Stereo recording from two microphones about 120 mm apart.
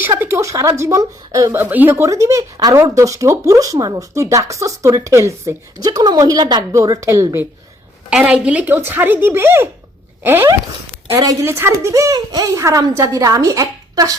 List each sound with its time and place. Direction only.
0.2 s a woman's voice: 20° right (ahead or behind)
1.7 s speech: 15° right (ahead or behind)
8.1 s speech: 10° right (ahead or behind); by 14.1 s 30° right (ahead or behind)